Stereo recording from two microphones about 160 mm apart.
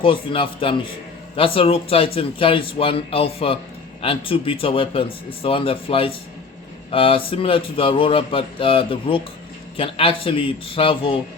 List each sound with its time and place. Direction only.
0.0 s speech: 30° left (ahead or behind)